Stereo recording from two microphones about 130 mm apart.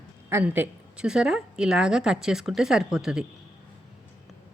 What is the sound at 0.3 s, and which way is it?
A woman's voice, 15° right (ahead or behind).